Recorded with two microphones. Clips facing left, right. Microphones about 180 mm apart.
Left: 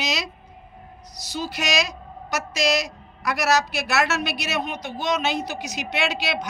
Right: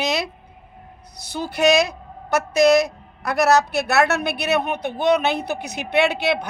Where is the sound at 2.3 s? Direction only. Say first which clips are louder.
Right 8 dB; 60° right (ahead or behind).